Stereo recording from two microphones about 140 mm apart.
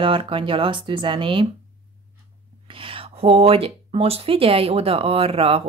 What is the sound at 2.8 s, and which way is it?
Speech, 40° right (ahead or behind).